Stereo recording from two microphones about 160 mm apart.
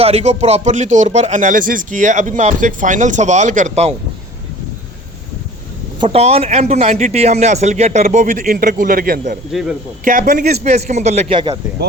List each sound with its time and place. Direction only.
0.0 s speech: 40° right (ahead or behind)
6.0 s speech: 40° right (ahead or behind); by 9.4 s 65° right (ahead or behind)
9.5 s speech: centre (ahead or behind)
10.0 s speech: 60° right (ahead or behind); by 11.3 s 45° right (ahead or behind)